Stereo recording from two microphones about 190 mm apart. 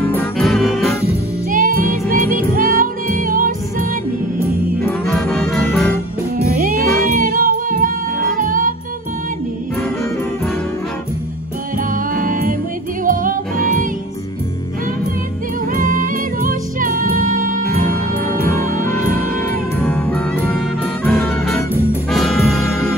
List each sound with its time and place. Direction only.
0.1 s music: 5° left (ahead or behind)
1.0 s music: 45° right (ahead or behind)
5.0 s music: centre (ahead or behind)
6.6 s music: 50° right (ahead or behind)
11.9 s music: 45° right (ahead or behind)
15.7 s music: 45° right (ahead or behind)
19.8 s music: 10° left (ahead or behind)